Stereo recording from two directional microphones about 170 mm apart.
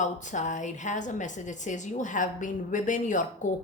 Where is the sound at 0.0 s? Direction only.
45° left (ahead or behind).